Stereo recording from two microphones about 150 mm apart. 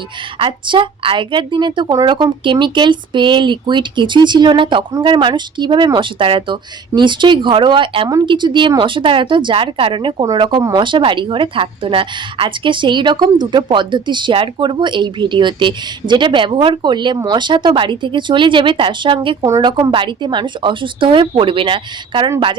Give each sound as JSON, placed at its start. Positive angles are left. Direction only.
{"t": 0.3, "sound": "a woman's voice", "side_deg": -35}